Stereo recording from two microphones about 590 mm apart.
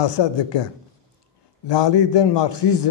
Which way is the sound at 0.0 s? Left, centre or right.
Left.